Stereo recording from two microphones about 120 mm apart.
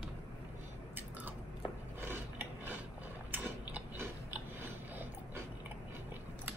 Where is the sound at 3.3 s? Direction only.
15° right (ahead or behind).